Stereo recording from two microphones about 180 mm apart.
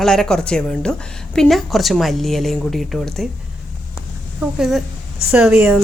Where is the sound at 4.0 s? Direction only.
5° right (ahead or behind).